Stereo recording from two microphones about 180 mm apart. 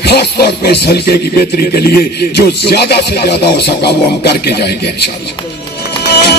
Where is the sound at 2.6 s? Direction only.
65° left (ahead or behind).